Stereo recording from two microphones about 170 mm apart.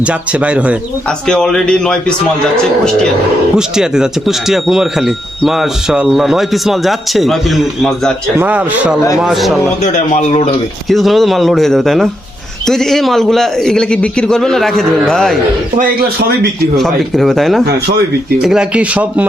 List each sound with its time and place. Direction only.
0.0 s speech: 5° right (ahead or behind)
1.3 s speech: 5° left (ahead or behind)
3.8 s speech: 5° right (ahead or behind)
9.8 s a man's voice: 40° left (ahead or behind)
10.8 s speech: centre (ahead or behind)
15.8 s speech: 60° right (ahead or behind)
16.7 s speech: centre (ahead or behind)